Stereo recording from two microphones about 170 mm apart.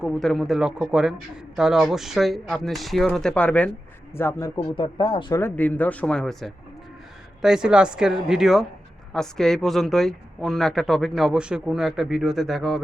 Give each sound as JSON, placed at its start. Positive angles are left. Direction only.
{"t": 0.0, "sound": "speech", "side_deg": 0}
{"t": 4.7, "sound": "speech", "side_deg": 30}
{"t": 5.4, "sound": "speech", "side_deg": 10}